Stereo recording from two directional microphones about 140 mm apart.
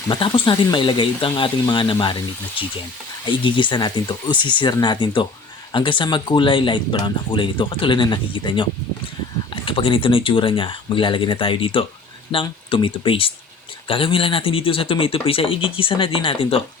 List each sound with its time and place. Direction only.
0.1 s speech: 35° left (ahead or behind)